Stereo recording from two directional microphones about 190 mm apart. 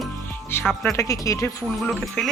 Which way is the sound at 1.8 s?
Centre (ahead or behind).